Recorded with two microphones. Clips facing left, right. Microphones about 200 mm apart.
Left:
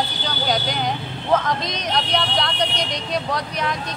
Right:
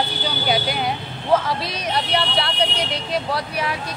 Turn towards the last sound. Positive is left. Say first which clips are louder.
# even
turn(degrees=-5)  # may be behind; listen again after turning